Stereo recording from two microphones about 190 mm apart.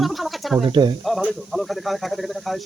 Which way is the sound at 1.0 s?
Centre (ahead or behind).